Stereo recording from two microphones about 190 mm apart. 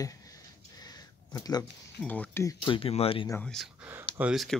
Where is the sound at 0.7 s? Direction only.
20° left (ahead or behind).